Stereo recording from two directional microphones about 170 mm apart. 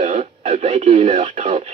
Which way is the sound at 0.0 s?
40° right (ahead or behind).